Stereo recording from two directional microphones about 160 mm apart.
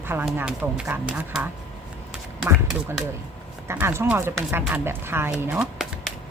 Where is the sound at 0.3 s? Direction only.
10° right (ahead or behind).